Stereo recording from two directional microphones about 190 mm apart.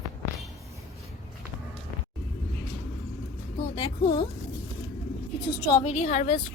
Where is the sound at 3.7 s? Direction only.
25° left (ahead or behind).